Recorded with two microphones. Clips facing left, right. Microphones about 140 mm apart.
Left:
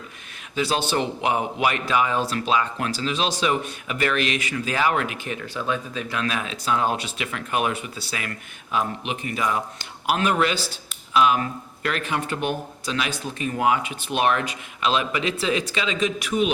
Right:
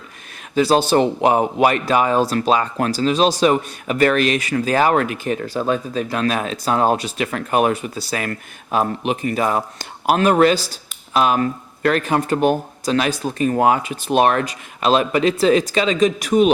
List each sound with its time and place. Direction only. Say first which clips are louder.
0.5 s a man's voice: right 9 dB; 40° right (ahead or behind)